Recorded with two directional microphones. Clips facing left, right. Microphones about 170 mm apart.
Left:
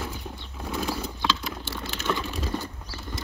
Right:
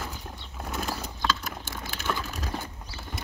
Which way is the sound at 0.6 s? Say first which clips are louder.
Left 3 dB; 5° right (ahead or behind).